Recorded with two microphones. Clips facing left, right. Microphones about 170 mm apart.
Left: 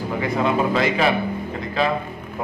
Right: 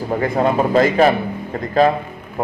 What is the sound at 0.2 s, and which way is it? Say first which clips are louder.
Speech: right 3 dB; 45° right (ahead or behind).